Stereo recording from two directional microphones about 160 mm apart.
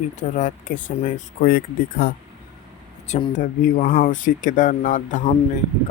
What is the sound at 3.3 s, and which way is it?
Speech, 55° left (ahead or behind).